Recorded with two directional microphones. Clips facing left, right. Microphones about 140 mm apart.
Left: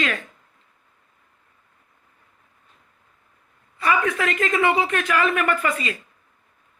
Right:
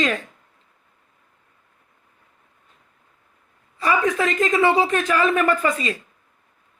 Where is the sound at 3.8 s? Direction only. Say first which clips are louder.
Right 2 dB; 35° right (ahead or behind).